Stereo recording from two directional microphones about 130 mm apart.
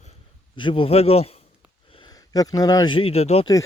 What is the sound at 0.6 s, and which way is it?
Speech, 40° left (ahead or behind).